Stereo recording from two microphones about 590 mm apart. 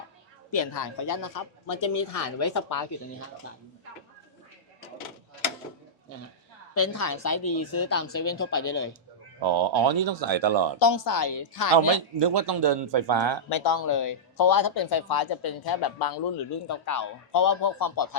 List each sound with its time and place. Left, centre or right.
0.5 s speech: left
6.7 s speech: left
9.4 s speech: right
10.8 s speech: left
12.2 s speech: right
13.5 s speech: left